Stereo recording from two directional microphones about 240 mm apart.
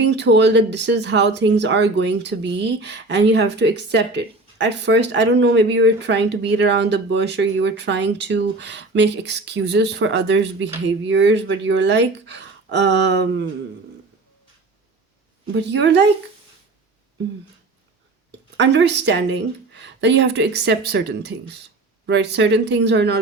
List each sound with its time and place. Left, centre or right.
0.0 s speech: right
15.5 s speech: right
18.3 s speech: right